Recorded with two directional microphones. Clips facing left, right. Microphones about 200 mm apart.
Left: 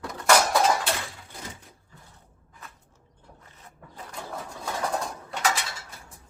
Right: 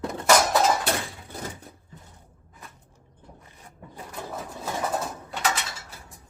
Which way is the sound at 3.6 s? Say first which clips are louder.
Right 2 dB; 10° right (ahead or behind).